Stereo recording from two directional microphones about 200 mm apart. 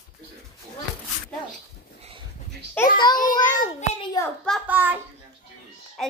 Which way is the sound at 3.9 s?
20° left (ahead or behind).